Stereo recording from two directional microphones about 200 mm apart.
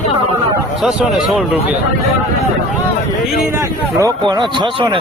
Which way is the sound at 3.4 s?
15° right (ahead or behind).